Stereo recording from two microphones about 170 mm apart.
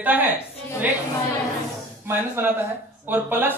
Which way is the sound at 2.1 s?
15° right (ahead or behind).